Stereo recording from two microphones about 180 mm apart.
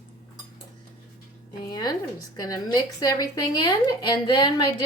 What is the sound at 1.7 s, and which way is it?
A woman's voice, 20° left (ahead or behind).